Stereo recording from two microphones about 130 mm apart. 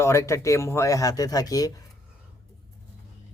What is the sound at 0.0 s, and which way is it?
Speech, 20° left (ahead or behind).